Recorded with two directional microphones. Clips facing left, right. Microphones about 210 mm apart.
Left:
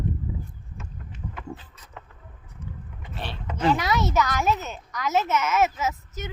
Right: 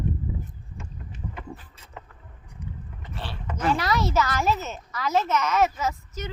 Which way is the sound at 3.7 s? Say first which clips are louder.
Even; centre (ahead or behind).